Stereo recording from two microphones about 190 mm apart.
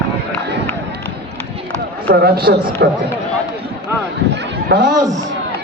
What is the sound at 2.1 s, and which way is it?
Speech, 55° right (ahead or behind).